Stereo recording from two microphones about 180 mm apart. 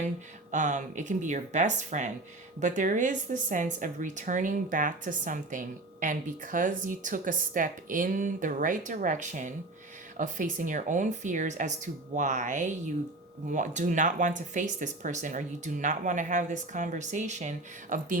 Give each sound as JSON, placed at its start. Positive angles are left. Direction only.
{"t": 0.5, "sound": "a woman's voice", "side_deg": -45}